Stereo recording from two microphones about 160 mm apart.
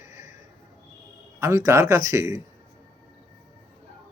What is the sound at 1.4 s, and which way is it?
Speech, 20° right (ahead or behind).